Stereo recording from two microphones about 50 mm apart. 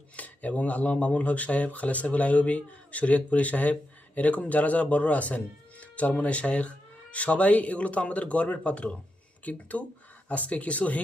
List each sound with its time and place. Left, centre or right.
0.2 s speech: left